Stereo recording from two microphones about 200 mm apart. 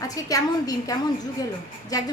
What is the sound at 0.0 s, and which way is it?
Speech, 15° left (ahead or behind).